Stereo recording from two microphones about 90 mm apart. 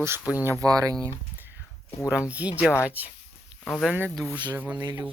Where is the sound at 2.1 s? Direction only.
15° right (ahead or behind).